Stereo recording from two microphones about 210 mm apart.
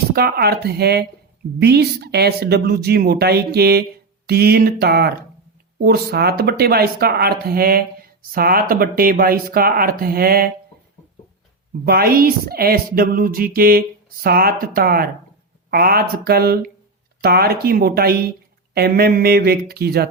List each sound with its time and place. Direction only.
0.1 s speech: 45° right (ahead or behind)
11.9 s speech: 45° right (ahead or behind)